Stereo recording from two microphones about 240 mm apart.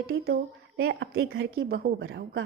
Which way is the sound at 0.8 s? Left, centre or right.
Right.